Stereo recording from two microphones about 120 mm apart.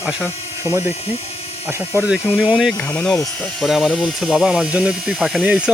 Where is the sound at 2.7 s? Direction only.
15° left (ahead or behind).